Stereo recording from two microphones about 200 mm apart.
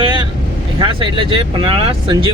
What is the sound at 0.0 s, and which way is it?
Vehicle, 25° right (ahead or behind).